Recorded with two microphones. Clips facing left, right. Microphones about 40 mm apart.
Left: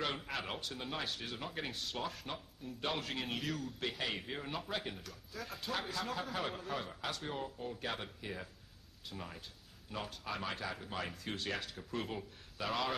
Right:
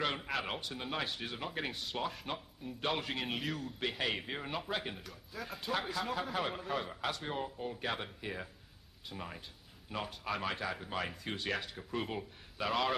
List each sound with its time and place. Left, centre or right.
0.3 s a man's voice: centre